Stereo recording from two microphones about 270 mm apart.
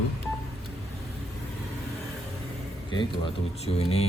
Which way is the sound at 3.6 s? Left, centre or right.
Left.